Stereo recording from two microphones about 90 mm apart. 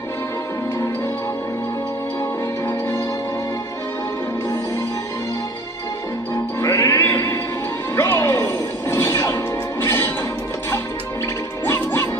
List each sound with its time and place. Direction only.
6.6 s music: 35° left (ahead or behind)
11.6 s music: 25° left (ahead or behind)